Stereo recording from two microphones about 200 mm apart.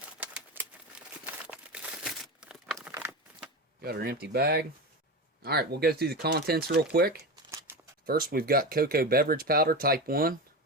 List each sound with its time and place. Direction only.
0.2 s crumpling: 5° right (ahead or behind)
2.7 s a sound: 10° right (ahead or behind)
3.8 s speech: 50° right (ahead or behind)